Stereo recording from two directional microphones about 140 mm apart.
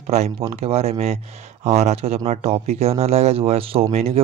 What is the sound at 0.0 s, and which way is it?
Speech, 50° right (ahead or behind).